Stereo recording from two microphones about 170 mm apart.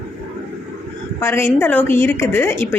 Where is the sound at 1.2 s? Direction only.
15° left (ahead or behind).